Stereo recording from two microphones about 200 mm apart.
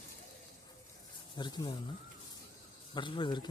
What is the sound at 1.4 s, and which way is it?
Speech, 20° left (ahead or behind).